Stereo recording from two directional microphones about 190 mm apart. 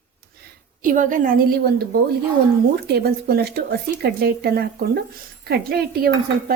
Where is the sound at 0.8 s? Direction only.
45° right (ahead or behind).